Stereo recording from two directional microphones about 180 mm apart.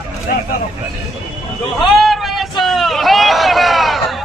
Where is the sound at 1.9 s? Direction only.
Centre (ahead or behind).